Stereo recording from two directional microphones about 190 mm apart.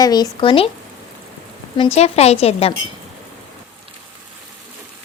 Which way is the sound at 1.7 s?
30° left (ahead or behind).